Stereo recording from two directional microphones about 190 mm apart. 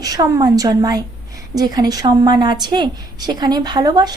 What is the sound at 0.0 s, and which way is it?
A woman's voice, 20° right (ahead or behind).